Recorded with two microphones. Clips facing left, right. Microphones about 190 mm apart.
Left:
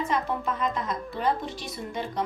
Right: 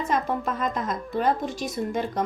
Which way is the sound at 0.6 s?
45° right (ahead or behind).